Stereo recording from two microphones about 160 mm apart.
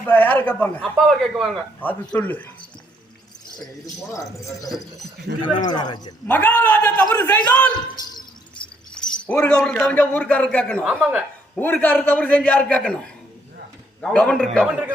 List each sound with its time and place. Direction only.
0.0 s a man's voice: 10° left (ahead or behind)
4.1 s a man's voice: 20° left (ahead or behind)
4.7 s a man's voice: centre (ahead or behind)
5.4 s a man's voice: 30° left (ahead or behind)
6.2 s a man's voice: 10° left (ahead or behind)
9.0 s a man's voice: 5° left (ahead or behind)
10.8 s speech: 10° right (ahead or behind)
11.5 s a man's voice: 10° left (ahead or behind)
14.0 s a man's voice: 5° left (ahead or behind)